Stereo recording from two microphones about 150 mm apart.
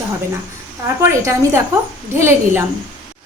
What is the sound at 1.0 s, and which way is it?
A woman's voice, 20° right (ahead or behind).